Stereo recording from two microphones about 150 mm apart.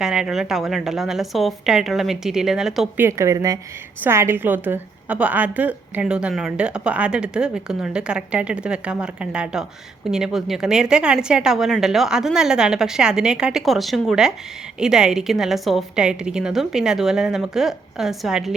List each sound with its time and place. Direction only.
0.0 s a woman's voice: 5° right (ahead or behind)
3.0 s a woman's voice: 20° right (ahead or behind); by 18.5 s centre (ahead or behind)